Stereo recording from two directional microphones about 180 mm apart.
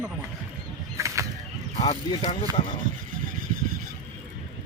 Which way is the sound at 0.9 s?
15° right (ahead or behind).